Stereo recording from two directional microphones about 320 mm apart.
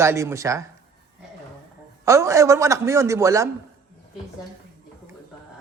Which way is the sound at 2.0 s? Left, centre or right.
Centre.